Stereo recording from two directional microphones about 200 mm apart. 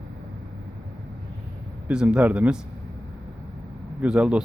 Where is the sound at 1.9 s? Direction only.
5° right (ahead or behind).